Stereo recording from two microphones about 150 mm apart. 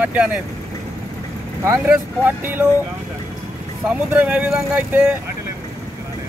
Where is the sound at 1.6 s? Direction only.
15° right (ahead or behind).